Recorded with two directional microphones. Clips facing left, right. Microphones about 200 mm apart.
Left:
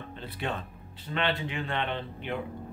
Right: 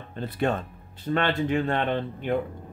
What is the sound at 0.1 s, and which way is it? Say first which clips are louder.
Speech: right 9 dB; 45° right (ahead or behind).